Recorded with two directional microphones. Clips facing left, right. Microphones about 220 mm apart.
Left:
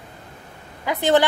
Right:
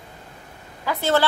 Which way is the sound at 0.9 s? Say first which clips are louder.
Left 3 dB; 15° left (ahead or behind).